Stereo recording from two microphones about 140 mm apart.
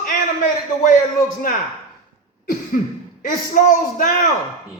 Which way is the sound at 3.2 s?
65° left (ahead or behind).